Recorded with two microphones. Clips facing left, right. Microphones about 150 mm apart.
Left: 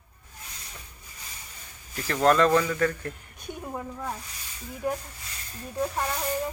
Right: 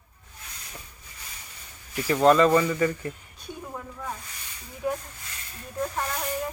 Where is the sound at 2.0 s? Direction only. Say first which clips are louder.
Right 2 dB; 5° right (ahead or behind).